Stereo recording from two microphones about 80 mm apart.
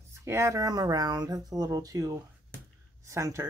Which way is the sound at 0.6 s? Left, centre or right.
Right.